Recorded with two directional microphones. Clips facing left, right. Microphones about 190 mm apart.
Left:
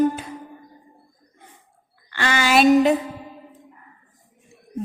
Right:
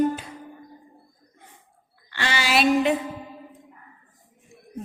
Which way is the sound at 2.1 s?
50° left (ahead or behind).